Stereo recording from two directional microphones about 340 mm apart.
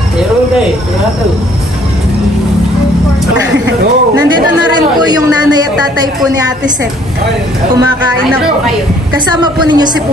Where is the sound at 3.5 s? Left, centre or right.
Right.